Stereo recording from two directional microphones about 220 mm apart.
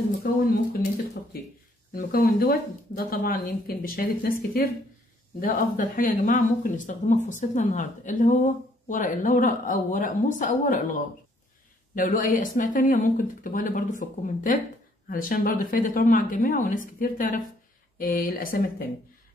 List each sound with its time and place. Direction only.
0.2 s speech: 40° left (ahead or behind)
2.0 s speech: 40° left (ahead or behind)